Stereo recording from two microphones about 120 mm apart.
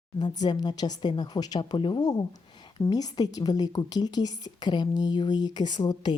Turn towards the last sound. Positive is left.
turn(degrees=35)  # may be behind; listen again after turning